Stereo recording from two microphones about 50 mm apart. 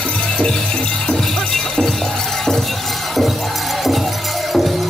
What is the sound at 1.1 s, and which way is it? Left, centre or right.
Shatter, centre.